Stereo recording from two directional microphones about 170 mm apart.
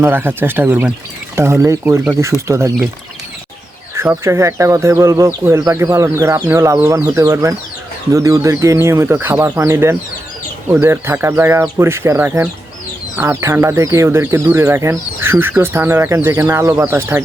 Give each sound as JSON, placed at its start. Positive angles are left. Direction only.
{"t": 0.0, "sound": "speech", "side_deg": -10}
{"t": 3.9, "sound": "speech", "side_deg": -15}